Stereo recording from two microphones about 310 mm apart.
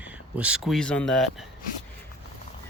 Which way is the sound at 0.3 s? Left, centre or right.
Centre.